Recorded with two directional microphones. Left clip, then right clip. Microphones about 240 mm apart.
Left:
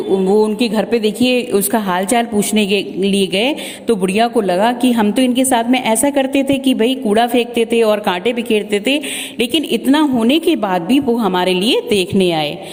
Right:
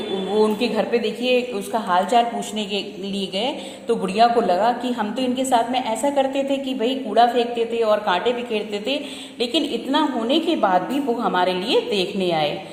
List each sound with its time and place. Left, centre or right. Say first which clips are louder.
0.3 s a woman's voice: left 5 dB; left